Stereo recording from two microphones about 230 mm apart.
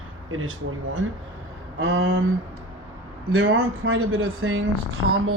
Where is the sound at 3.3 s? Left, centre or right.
Right.